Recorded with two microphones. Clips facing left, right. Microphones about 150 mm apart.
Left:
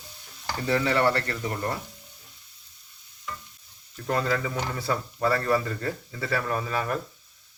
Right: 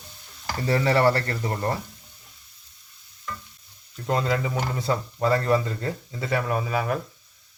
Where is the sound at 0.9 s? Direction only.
35° right (ahead or behind).